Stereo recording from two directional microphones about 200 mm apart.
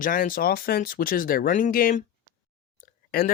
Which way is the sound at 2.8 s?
45° left (ahead or behind).